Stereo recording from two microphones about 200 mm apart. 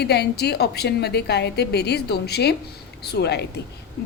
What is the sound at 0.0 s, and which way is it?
A woman's voice, 55° left (ahead or behind).